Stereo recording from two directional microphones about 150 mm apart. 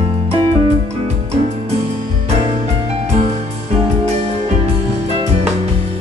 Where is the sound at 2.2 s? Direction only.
45° right (ahead or behind).